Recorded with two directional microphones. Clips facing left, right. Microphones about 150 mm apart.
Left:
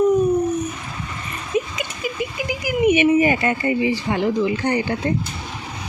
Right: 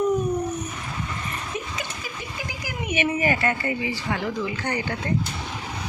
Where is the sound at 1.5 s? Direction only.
15° left (ahead or behind).